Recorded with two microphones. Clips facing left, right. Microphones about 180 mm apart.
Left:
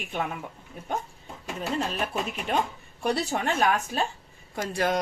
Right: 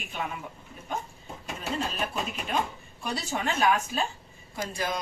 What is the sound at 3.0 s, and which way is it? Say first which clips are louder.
Speech: left 6 dB; 60° left (ahead or behind).